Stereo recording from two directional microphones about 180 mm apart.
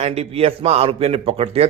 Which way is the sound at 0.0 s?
35° right (ahead or behind).